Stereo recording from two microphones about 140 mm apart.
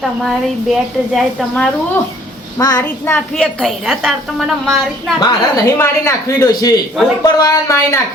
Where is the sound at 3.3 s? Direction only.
5° left (ahead or behind).